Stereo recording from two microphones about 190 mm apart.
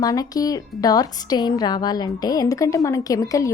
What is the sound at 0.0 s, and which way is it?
A woman's voice, 20° left (ahead or behind).